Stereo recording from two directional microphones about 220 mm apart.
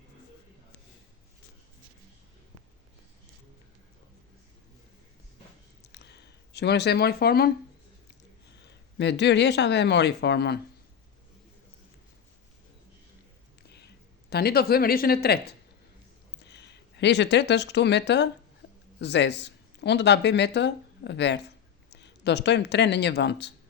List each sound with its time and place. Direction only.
5.9 s a sound: 50° left (ahead or behind)
9.0 s speech: 50° left (ahead or behind)
13.7 s speech: 50° left (ahead or behind)